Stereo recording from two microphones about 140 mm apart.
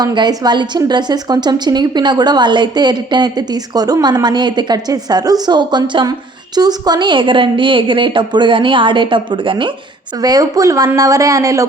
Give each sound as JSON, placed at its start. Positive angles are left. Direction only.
{"t": 0.0, "sound": "a woman's voice", "side_deg": -30}